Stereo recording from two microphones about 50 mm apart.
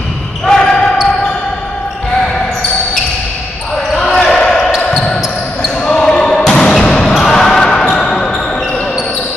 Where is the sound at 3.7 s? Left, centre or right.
Centre.